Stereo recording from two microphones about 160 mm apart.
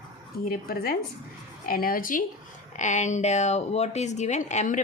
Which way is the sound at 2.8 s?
50° left (ahead or behind).